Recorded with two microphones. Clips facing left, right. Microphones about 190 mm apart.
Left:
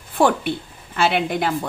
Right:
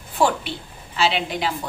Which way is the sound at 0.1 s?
55° left (ahead or behind).